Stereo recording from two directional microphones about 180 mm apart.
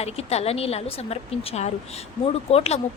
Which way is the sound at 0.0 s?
35° left (ahead or behind).